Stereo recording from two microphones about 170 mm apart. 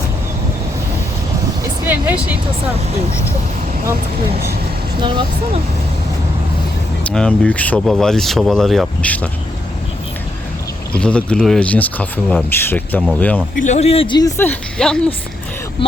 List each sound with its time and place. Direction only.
1.9 s speech: 10° right (ahead or behind)
4.9 s speech: 30° right (ahead or behind)
7.0 s speech: 5° left (ahead or behind)
10.9 s speech: 5° left (ahead or behind)
13.6 s a man's voice: 45° left (ahead or behind)
14.2 s speech: 15° left (ahead or behind)